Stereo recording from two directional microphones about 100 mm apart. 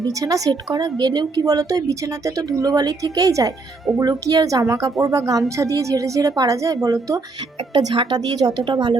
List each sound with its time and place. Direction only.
0.1 s a woman's voice: 35° right (ahead or behind); by 9.0 s 50° right (ahead or behind)